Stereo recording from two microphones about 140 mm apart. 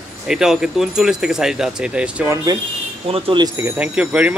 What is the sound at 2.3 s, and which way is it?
Speech, 25° right (ahead or behind).